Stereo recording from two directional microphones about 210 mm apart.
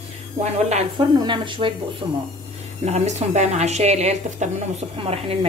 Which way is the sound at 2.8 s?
30° right (ahead or behind).